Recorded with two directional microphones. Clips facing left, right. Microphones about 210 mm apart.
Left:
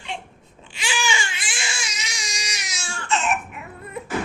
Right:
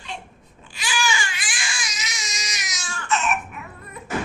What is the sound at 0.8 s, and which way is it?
Baby cry, 25° left (ahead or behind).